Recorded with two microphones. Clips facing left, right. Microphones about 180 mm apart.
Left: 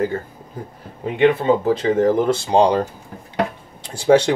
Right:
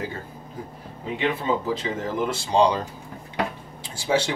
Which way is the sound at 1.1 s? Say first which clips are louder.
Left 9 dB; 55° left (ahead or behind).